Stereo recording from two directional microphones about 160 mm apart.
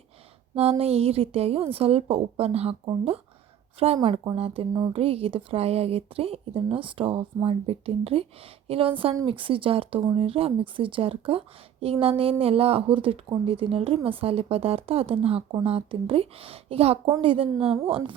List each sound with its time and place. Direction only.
0.5 s speech: 40° right (ahead or behind)
4.0 s speech: 30° right (ahead or behind)